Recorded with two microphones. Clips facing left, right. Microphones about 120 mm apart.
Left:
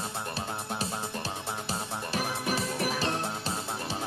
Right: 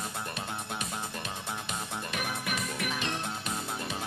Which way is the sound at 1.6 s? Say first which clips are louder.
Left 2 dB; 35° left (ahead or behind).